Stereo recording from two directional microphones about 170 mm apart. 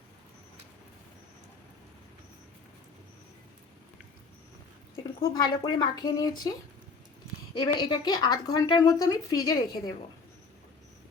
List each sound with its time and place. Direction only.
5.3 s a woman's voice: 25° left (ahead or behind)
7.5 s a woman's voice: 30° left (ahead or behind)